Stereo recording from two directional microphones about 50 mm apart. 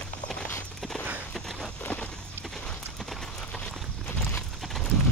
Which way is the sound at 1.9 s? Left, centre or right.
Left.